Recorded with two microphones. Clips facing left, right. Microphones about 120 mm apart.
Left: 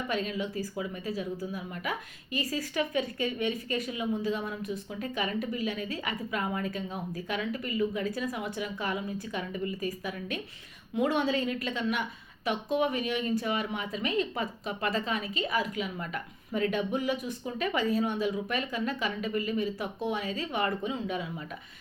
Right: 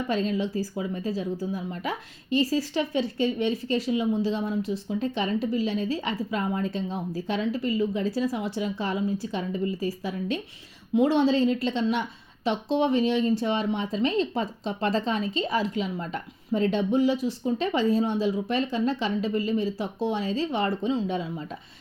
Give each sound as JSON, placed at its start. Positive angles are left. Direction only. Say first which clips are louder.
{"t": 0.1, "sound": "a woman's voice", "louder": "right 6 dB", "side_deg": -30}